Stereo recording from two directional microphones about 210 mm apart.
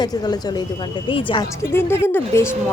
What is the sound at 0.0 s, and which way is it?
Speech, 20° left (ahead or behind).